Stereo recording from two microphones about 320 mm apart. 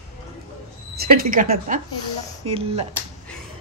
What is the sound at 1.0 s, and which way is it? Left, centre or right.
A woman's voice, right.